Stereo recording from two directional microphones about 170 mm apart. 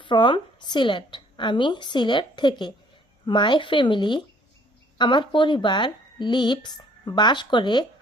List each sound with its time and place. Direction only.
0.0 s a woman's voice: 30° left (ahead or behind)